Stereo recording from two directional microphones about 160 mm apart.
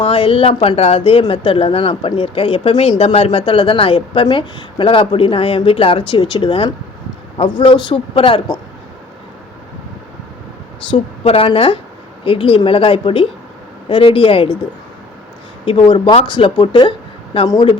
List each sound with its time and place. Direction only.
0.0 s speech: 35° left (ahead or behind)
10.9 s speech: 35° left (ahead or behind)
15.6 s speech: 35° left (ahead or behind)